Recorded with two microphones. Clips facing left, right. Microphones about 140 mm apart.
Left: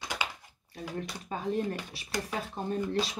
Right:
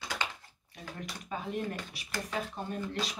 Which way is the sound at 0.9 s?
35° left (ahead or behind).